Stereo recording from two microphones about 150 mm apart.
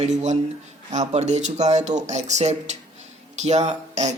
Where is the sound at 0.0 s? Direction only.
50° right (ahead or behind).